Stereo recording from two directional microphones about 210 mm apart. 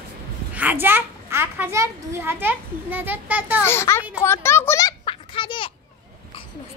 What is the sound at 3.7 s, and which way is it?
Speech, 10° left (ahead or behind).